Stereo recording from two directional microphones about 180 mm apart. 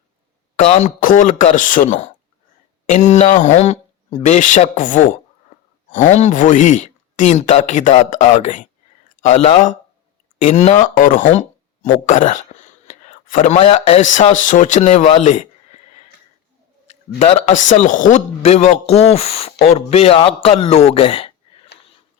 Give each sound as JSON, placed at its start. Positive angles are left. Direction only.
{"t": 0.5, "sound": "speech", "side_deg": 40}
{"t": 12.9, "sound": "a sound", "side_deg": 45}
{"t": 13.6, "sound": "speech", "side_deg": 30}
{"t": 17.2, "sound": "speech", "side_deg": 40}